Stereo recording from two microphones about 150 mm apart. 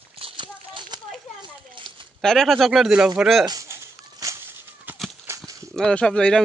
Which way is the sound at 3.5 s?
20° right (ahead or behind).